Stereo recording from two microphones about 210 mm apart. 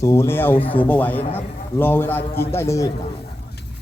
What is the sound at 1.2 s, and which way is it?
Speech, 25° left (ahead or behind).